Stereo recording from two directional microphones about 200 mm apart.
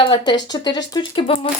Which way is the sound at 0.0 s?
20° left (ahead or behind).